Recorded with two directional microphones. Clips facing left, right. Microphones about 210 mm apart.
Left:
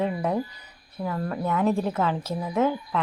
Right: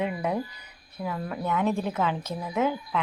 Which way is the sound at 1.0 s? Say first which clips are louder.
Left 3 dB; 5° right (ahead or behind).